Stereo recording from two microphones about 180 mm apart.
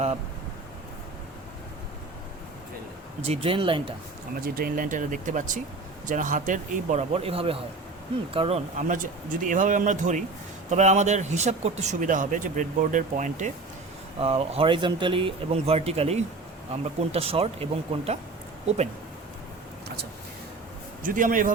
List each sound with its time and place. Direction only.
3.2 s speech: 30° right (ahead or behind)
4.4 s a man's voice: 55° right (ahead or behind); by 18.2 s 35° right (ahead or behind)
21.0 s a man's voice: 50° right (ahead or behind)